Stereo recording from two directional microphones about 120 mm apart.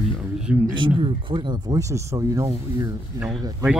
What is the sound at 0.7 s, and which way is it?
Speech, 45° right (ahead or behind).